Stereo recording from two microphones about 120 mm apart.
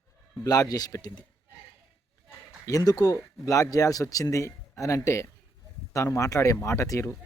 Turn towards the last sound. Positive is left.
turn(degrees=25)  # may be behind; listen again after turning